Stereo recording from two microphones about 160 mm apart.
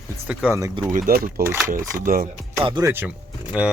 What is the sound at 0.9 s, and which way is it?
Speech, 65° right (ahead or behind).